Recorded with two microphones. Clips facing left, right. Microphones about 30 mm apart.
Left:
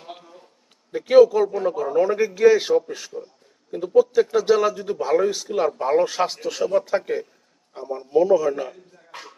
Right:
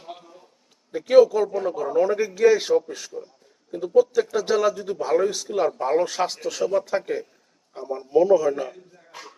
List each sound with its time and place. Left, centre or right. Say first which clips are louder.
0.9 s speech: left 2 dB; centre
9.1 s dog: left 2 dB; left